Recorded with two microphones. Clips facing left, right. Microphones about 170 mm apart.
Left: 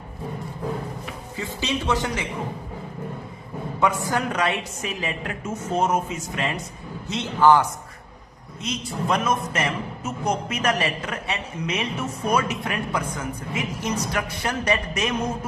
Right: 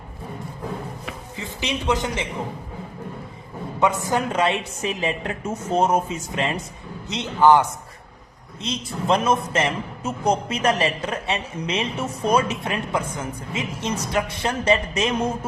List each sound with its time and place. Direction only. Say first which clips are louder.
1.4 s a man's voice: left 2 dB; 15° right (ahead or behind)
3.8 s a man's voice: right 2 dB; 20° right (ahead or behind)
7.1 s a man's voice: right 1 dB; 20° right (ahead or behind)
8.6 s a man's voice: right 2 dB; 30° right (ahead or behind)